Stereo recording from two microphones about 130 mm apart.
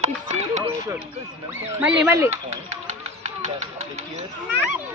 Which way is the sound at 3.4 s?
60° right (ahead or behind).